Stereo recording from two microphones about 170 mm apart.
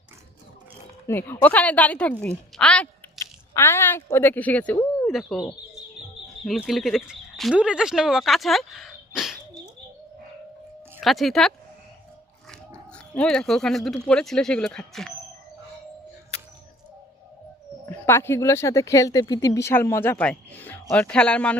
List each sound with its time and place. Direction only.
1.0 s speech: 15° left (ahead or behind)
11.0 s speech: centre (ahead or behind)
12.5 s oink: 5° left (ahead or behind)
14.1 s speech: 5° left (ahead or behind)
17.8 s speech: 15° left (ahead or behind)